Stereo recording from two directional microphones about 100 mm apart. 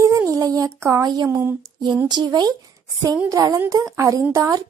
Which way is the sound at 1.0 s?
45° right (ahead or behind).